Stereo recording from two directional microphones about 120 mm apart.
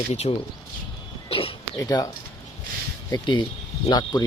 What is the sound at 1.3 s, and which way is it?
Speech, 50° left (ahead or behind).